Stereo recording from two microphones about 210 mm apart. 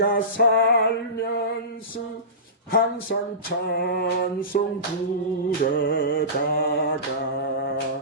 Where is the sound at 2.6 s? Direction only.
45° left (ahead or behind).